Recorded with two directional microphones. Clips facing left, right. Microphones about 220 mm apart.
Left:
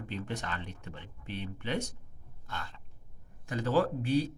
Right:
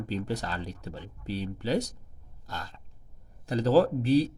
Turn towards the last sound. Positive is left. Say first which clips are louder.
# right 6 dB
turn(degrees=-35)  # may be behind; listen again after turning